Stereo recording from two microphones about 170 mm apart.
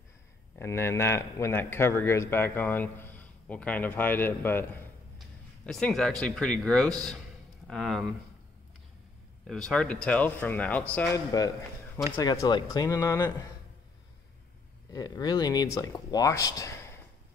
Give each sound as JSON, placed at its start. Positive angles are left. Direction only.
{"t": 0.6, "sound": "speech", "side_deg": 15}
{"t": 5.7, "sound": "speech", "side_deg": 5}
{"t": 9.5, "sound": "speech", "side_deg": 0}
{"t": 12.2, "sound": "speech", "side_deg": 25}
{"t": 14.9, "sound": "speech", "side_deg": 20}